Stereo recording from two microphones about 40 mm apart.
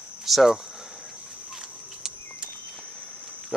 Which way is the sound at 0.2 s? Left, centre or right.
Centre.